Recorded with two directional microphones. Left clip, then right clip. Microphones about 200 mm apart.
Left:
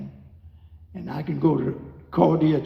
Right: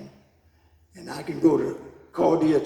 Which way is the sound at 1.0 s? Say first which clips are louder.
Right 2 dB; 40° right (ahead or behind).